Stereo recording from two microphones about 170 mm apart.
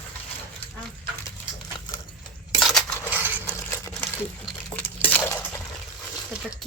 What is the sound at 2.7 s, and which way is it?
Crushing, 5° left (ahead or behind).